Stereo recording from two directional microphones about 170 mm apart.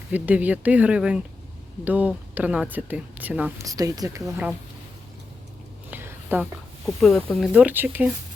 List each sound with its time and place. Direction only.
0.1 s speech: 10° right (ahead or behind)
3.6 s speech: 20° right (ahead or behind)
5.9 s a sound: 15° right (ahead or behind)
6.8 s speech: centre (ahead or behind)